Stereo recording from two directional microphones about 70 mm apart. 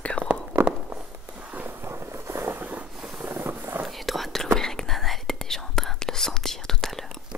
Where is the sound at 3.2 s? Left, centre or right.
Right.